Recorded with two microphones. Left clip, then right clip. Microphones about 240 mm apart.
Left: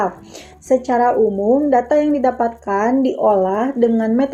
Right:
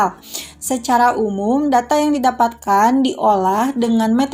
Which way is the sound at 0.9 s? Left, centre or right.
Right.